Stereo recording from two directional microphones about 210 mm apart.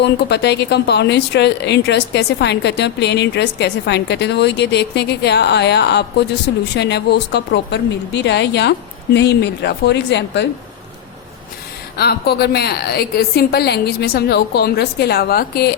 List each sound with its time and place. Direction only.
0.0 s speech: 55° left (ahead or behind)
11.9 s speech: 50° left (ahead or behind)